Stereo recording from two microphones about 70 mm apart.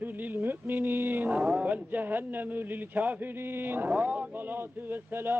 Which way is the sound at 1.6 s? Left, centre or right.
Right.